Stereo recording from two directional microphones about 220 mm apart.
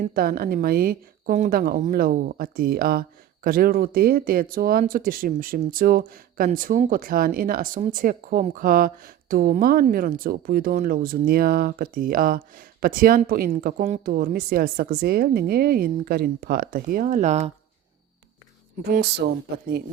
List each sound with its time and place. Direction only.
0.0 s a woman's voice: 40° right (ahead or behind)
18.9 s speech: 45° right (ahead or behind)